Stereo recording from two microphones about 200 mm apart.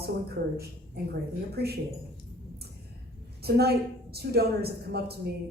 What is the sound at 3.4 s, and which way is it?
A woman's voice, 55° right (ahead or behind).